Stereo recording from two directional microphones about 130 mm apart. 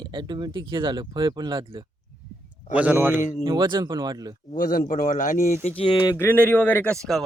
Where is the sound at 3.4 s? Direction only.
35° right (ahead or behind).